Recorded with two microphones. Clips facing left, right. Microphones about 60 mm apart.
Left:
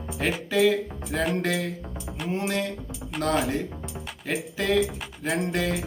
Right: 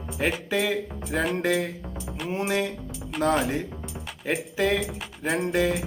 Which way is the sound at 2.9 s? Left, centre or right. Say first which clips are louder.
Right 3 dB; centre.